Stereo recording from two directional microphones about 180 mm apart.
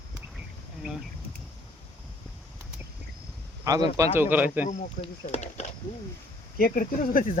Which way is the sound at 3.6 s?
20° right (ahead or behind).